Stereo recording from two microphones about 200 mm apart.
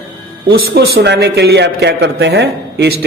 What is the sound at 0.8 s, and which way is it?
Speech, 55° right (ahead or behind).